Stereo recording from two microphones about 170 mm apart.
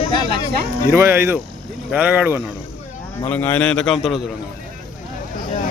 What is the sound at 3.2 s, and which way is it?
Speech, 10° left (ahead or behind).